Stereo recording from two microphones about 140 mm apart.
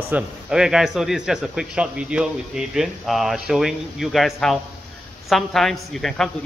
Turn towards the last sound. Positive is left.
turn(degrees=0)  # may be behind; listen again after turning